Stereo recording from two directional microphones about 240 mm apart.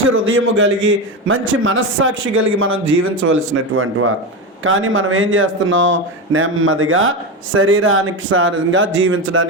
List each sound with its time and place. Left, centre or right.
0.0 s a man's voice: right